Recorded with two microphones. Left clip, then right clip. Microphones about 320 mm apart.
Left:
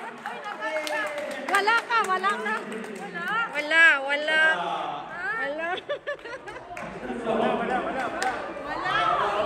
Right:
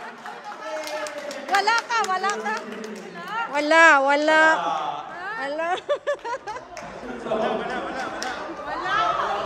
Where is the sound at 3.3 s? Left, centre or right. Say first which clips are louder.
Right 4 dB; centre.